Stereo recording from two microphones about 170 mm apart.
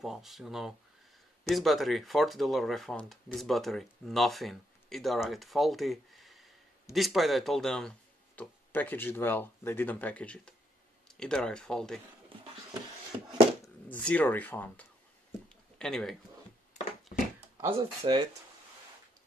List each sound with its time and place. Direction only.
0.0 s speech: centre (ahead or behind)
13.8 s speech: 10° left (ahead or behind)
17.1 s a sound: 55° left (ahead or behind)
17.6 s speech: 25° right (ahead or behind)